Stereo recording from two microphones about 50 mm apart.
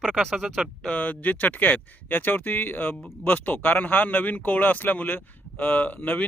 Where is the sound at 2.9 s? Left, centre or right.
Left.